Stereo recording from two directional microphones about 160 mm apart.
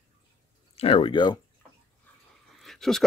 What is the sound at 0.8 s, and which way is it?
Speech, 35° left (ahead or behind).